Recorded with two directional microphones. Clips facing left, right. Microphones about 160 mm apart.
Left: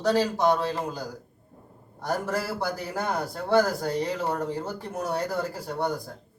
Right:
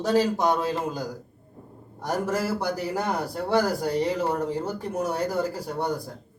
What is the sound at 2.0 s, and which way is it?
A man's voice, 15° right (ahead or behind).